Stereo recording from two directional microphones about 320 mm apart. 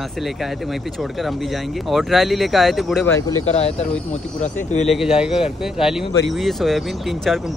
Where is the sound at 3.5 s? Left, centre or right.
Centre.